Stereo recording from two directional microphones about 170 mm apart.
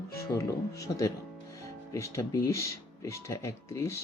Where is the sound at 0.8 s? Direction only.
20° left (ahead or behind).